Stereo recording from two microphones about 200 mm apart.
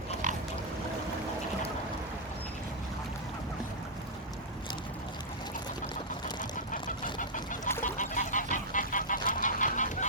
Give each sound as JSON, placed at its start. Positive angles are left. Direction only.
{"t": 7.2, "sound": "chicken", "side_deg": 40}
{"t": 7.8, "sound": "goose", "side_deg": 40}
{"t": 8.5, "sound": "duck", "side_deg": 40}